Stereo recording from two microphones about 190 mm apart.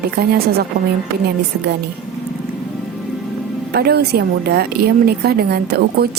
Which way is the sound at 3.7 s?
55° right (ahead or behind).